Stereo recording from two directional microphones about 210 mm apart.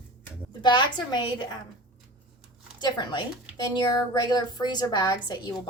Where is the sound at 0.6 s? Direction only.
20° left (ahead or behind).